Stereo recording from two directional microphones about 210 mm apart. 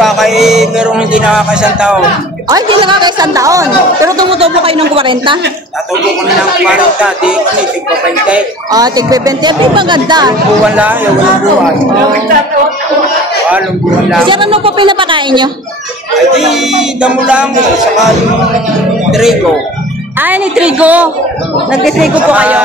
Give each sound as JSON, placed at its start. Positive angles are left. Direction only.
{"t": 0.0, "sound": "music", "side_deg": 0}
{"t": 2.5, "sound": "a woman's voice", "side_deg": -20}
{"t": 4.4, "sound": "speech", "side_deg": -25}
{"t": 6.6, "sound": "music", "side_deg": -5}
{"t": 8.7, "sound": "speech", "side_deg": -20}
{"t": 14.2, "sound": "speech", "side_deg": -25}
{"t": 16.3, "sound": "music", "side_deg": 0}
{"t": 19.0, "sound": "music", "side_deg": 0}
{"t": 20.2, "sound": "a woman's voice", "side_deg": -5}